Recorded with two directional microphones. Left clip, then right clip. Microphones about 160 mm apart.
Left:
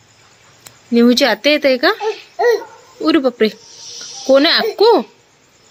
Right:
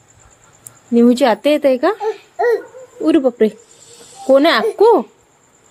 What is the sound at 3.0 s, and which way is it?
A child's voice, 25° right (ahead or behind).